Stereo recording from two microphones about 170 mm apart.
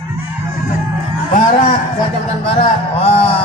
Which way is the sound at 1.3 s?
45° left (ahead or behind).